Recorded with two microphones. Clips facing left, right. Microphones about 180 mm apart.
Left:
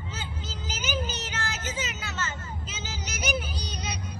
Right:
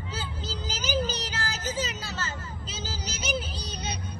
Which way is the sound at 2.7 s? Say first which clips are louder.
Right 5 dB; 30° right (ahead or behind).